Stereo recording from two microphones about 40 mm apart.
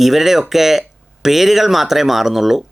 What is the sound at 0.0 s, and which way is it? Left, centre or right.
Speech, centre.